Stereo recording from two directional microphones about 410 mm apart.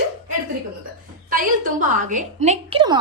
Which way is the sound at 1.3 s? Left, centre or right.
Centre.